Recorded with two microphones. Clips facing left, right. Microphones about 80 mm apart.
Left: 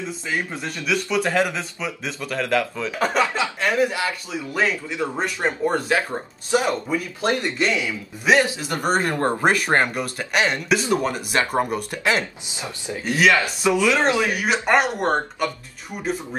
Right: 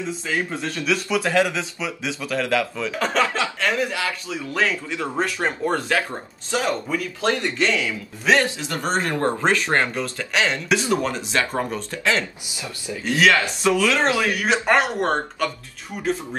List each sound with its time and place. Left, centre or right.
0.3 s a man's voice: centre; by 13.0 s left
13.0 s speech: centre